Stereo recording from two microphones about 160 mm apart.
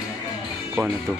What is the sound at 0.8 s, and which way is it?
Speech, centre (ahead or behind).